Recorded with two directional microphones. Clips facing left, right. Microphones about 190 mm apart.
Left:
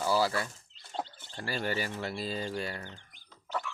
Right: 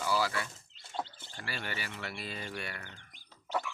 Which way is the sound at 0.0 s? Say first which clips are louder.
Left 4 dB; 35° left (ahead or behind).